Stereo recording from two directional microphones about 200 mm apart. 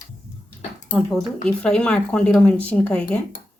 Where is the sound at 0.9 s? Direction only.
Centre (ahead or behind).